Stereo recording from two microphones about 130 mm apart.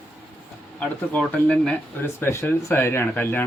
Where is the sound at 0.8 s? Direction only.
10° left (ahead or behind).